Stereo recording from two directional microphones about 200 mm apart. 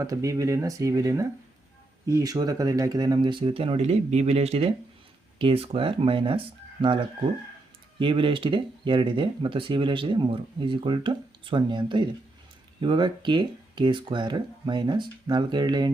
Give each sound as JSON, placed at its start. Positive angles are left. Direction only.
{"t": 0.0, "sound": "speech", "side_deg": -15}